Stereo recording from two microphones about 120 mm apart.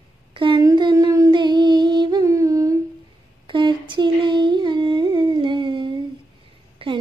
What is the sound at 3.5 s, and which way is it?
Humming, 40° right (ahead or behind).